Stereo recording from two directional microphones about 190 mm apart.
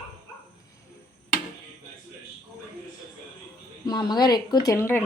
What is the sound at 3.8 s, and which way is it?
Speech, 20° left (ahead or behind).